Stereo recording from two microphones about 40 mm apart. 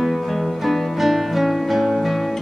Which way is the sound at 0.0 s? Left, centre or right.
Centre.